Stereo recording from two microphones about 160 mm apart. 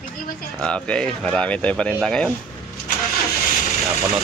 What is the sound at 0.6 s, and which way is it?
Speech, 5° left (ahead or behind).